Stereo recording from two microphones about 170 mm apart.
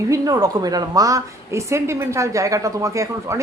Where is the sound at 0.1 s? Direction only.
20° right (ahead or behind).